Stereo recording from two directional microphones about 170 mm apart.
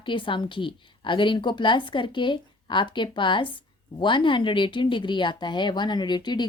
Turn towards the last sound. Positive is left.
turn(degrees=25)  # may be behind; listen again after turning